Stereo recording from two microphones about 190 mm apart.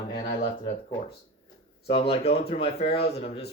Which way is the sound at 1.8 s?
30° left (ahead or behind).